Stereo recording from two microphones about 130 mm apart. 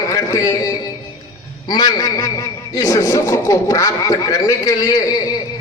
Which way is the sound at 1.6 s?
30° left (ahead or behind).